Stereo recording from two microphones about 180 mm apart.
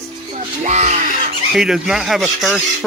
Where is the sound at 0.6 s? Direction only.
40° right (ahead or behind).